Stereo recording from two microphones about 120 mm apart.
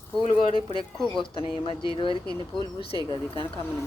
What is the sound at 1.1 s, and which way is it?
Speech, 45° left (ahead or behind).